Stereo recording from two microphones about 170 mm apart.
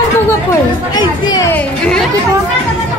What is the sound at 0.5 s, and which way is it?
Chatter, 25° left (ahead or behind).